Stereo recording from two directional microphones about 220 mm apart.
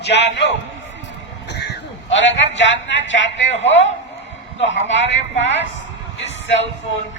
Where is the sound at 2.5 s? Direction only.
55° left (ahead or behind).